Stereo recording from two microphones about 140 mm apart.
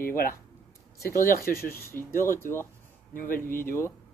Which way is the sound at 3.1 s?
75° left (ahead or behind).